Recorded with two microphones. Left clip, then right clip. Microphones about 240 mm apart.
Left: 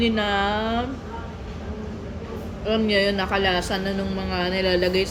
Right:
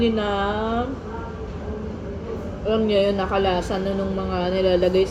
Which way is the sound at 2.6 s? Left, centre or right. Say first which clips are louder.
Right 2 dB; left.